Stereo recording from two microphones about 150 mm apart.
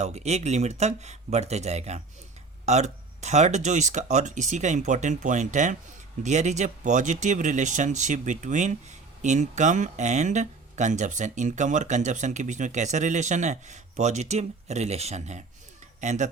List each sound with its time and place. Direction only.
0.0 s speech: 45° right (ahead or behind)